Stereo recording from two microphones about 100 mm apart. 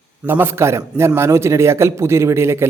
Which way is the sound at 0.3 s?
25° right (ahead or behind).